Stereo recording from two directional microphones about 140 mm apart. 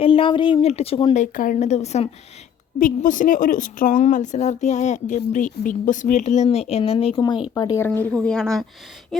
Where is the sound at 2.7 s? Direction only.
70° left (ahead or behind); by 7.2 s 45° left (ahead or behind).